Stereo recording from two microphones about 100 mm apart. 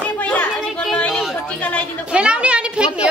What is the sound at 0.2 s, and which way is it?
Children playing, 15° left (ahead or behind).